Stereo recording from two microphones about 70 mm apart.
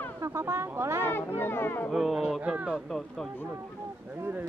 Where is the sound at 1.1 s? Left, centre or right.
Left.